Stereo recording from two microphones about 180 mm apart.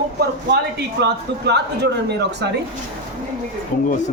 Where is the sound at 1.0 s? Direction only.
70° right (ahead or behind).